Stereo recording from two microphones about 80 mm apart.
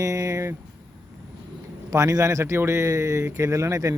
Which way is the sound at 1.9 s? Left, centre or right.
Right.